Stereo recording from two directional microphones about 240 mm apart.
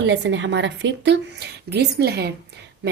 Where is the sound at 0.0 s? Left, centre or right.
Right.